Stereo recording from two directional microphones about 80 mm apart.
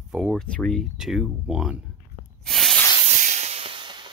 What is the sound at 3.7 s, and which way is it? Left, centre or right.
Hiss, right.